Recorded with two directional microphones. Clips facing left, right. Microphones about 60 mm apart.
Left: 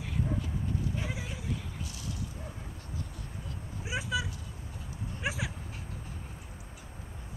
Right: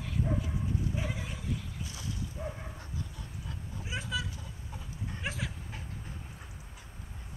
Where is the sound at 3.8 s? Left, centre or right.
Centre.